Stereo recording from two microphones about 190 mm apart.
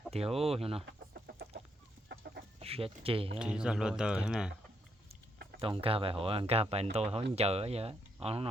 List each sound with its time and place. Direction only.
0.1 s speech: 30° right (ahead or behind)
0.9 s chicken: 60° right (ahead or behind)
2.6 s speech: 30° right (ahead or behind)
3.3 s speech: 5° right (ahead or behind)
5.5 s speech: 30° right (ahead or behind)